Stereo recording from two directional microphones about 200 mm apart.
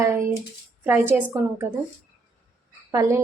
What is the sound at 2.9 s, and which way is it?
Speech, 15° right (ahead or behind).